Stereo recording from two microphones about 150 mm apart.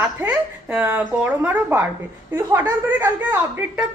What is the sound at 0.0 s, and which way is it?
A woman's voice, 5° right (ahead or behind).